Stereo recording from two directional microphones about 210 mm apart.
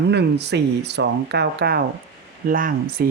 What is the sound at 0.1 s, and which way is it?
Speech, 50° right (ahead or behind).